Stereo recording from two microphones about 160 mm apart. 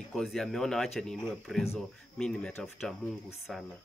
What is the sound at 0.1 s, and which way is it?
Speech, centre (ahead or behind).